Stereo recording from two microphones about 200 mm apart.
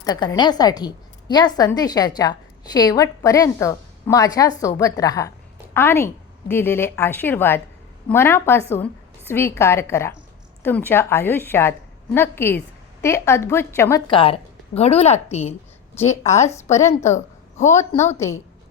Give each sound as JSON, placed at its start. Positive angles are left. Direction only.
{"t": 0.0, "sound": "a woman's voice", "side_deg": 20}
{"t": 14.1, "sound": "a woman's voice", "side_deg": 25}
{"t": 16.0, "sound": "a woman's voice", "side_deg": 15}
{"t": 17.1, "sound": "a sound", "side_deg": 35}
{"t": 17.7, "sound": "a woman's voice", "side_deg": 15}